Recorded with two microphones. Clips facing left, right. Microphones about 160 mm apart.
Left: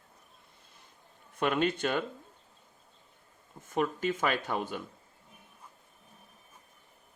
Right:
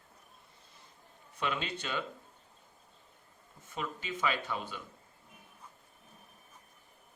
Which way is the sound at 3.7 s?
50° left (ahead or behind).